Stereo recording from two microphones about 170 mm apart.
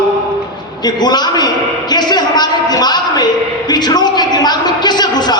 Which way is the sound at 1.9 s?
25° left (ahead or behind).